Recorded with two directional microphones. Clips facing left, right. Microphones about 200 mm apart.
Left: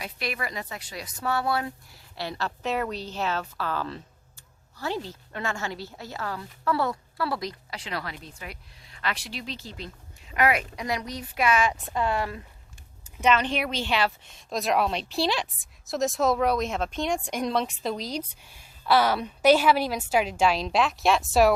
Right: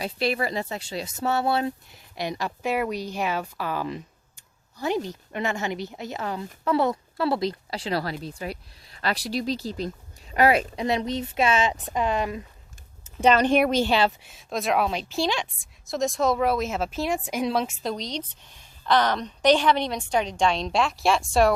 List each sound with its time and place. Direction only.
0.0 s a woman's voice: 30° right (ahead or behind)
13.2 s speech: 40° right (ahead or behind)
14.3 s a woman's voice: centre (ahead or behind)